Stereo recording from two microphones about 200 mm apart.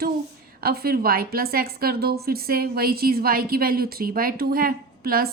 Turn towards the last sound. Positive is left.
turn(degrees=-50)  # may be behind; listen again after turning